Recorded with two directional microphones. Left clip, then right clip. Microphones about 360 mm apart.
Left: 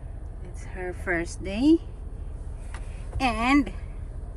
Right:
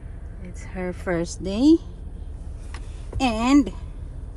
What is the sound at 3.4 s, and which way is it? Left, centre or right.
Speech, centre.